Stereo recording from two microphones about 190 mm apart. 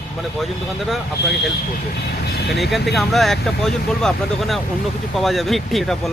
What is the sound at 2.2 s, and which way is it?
Speech, 60° left (ahead or behind).